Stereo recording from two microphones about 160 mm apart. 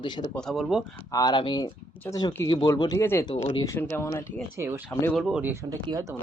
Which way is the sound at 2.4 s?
25° left (ahead or behind).